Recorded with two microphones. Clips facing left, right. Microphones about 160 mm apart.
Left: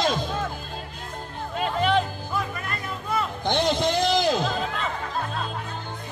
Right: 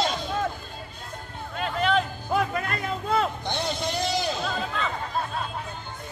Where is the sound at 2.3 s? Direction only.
60° right (ahead or behind).